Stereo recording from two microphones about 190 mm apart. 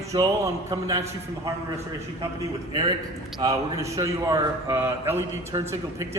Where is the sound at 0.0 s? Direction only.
15° right (ahead or behind).